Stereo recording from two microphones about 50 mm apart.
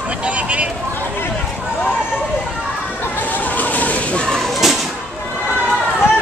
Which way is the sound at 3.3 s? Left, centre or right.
Left.